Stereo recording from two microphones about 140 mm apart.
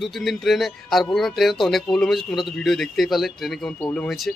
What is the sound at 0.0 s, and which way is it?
Speech, centre (ahead or behind).